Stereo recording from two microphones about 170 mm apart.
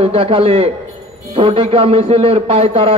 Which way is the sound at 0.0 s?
35° right (ahead or behind).